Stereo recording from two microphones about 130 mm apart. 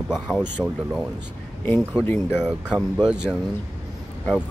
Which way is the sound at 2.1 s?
15° left (ahead or behind).